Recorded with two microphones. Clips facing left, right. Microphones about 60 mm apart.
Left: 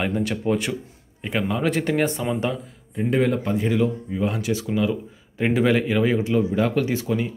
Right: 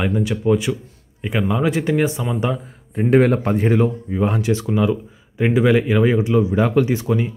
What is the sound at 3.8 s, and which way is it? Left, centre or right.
Speech, right.